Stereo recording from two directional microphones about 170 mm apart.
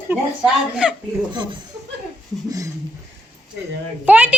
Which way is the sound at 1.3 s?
25° right (ahead or behind).